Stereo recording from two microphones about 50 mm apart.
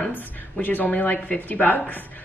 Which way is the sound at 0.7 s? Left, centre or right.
Left.